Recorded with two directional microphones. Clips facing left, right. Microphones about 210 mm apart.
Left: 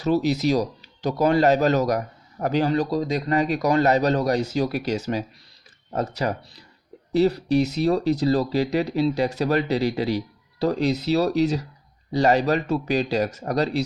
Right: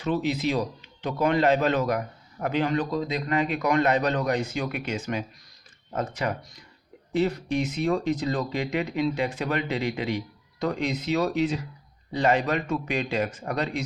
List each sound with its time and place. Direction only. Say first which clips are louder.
0.0 s speech: left 5 dB; 40° left (ahead or behind)